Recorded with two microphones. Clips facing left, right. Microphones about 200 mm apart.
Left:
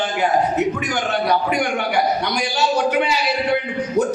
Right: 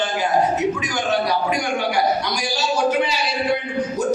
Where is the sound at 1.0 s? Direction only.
60° left (ahead or behind).